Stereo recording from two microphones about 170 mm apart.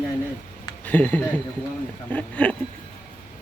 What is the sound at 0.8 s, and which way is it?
Speech, 10° left (ahead or behind).